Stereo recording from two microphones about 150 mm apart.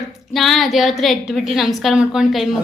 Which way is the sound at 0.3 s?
Centre (ahead or behind).